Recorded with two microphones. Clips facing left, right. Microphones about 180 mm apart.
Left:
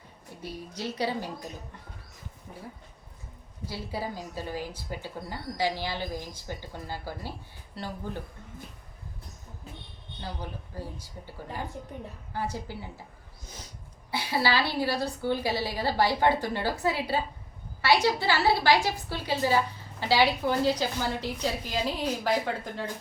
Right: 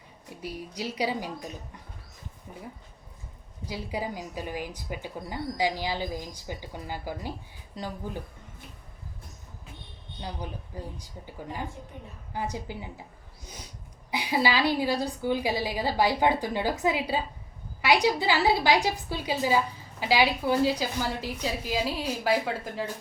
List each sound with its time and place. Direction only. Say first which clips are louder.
0.4 s a woman's voice: right 1 dB; 10° right (ahead or behind)
3.7 s a woman's voice: right 2 dB; 15° right (ahead or behind)
10.2 s speech: right 1 dB; 15° right (ahead or behind)
12.3 s a woman's voice: right 1 dB; 15° right (ahead or behind)
14.1 s a woman's voice: right 1 dB; 15° right (ahead or behind)